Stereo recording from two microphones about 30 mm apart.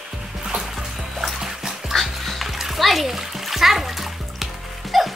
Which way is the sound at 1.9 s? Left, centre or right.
Centre.